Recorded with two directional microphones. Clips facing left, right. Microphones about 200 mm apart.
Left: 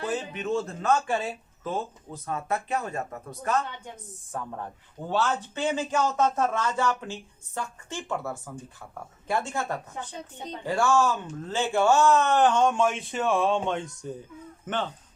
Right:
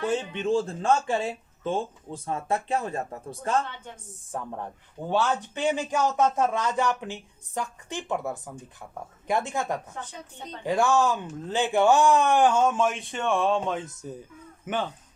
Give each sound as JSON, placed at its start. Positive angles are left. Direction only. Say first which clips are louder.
{"t": 0.0, "sound": "speech", "louder": "right 3 dB", "side_deg": -30}
{"t": 4.3, "sound": "a man's voice", "louder": "right 1 dB", "side_deg": -20}